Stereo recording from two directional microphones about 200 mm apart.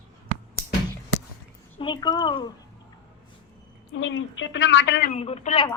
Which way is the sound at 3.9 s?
70° left (ahead or behind).